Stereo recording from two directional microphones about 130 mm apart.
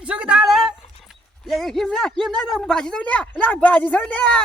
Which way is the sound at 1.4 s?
Centre (ahead or behind).